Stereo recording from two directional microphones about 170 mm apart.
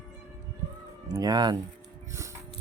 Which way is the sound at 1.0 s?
20° right (ahead or behind).